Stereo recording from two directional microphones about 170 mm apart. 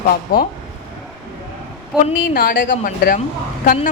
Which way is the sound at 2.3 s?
55° left (ahead or behind).